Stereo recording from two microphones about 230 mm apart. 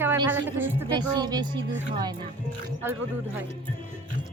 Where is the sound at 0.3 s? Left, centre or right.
Centre.